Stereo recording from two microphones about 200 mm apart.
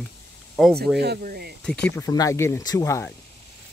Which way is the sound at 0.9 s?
50° right (ahead or behind).